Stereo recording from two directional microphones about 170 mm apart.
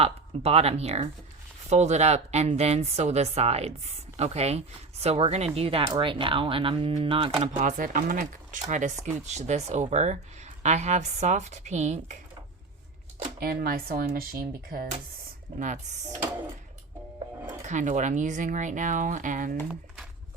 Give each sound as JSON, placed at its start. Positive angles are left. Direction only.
{"t": 0.0, "sound": "speech", "side_deg": -35}
{"t": 7.6, "sound": "speech", "side_deg": -50}
{"t": 13.4, "sound": "speech", "side_deg": -65}
{"t": 15.5, "sound": "speech", "side_deg": -45}
{"t": 17.4, "sound": "speech", "side_deg": -45}